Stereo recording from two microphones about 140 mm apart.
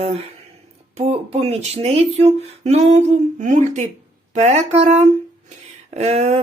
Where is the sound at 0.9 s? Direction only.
50° right (ahead or behind).